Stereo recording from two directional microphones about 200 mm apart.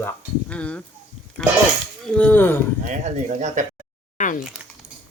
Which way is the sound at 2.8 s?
35° right (ahead or behind).